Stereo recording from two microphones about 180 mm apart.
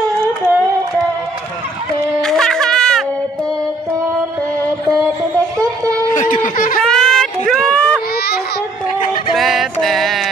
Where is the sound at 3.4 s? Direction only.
20° right (ahead or behind).